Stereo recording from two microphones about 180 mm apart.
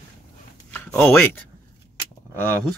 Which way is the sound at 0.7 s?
10° left (ahead or behind).